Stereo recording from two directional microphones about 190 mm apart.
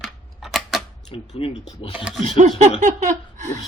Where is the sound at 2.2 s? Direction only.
40° right (ahead or behind).